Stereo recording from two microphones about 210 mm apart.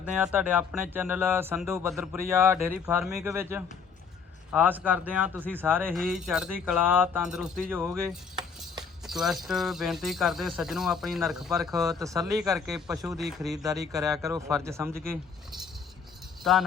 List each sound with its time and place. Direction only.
0.0 s speech: 5° right (ahead or behind)
9.0 s speech: centre (ahead or behind)
11.9 s speech: 15° right (ahead or behind)
12.5 s speech: centre (ahead or behind)
14.2 s speech: 15° right (ahead or behind)
16.4 s speech: centre (ahead or behind)